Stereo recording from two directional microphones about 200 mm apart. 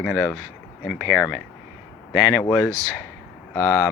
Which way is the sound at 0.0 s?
Centre (ahead or behind).